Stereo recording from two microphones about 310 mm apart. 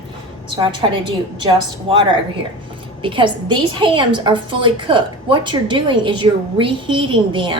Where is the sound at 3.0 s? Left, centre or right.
Centre.